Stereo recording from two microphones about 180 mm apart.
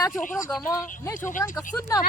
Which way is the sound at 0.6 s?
15° left (ahead or behind).